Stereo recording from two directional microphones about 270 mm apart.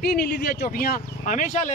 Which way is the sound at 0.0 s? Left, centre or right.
Left.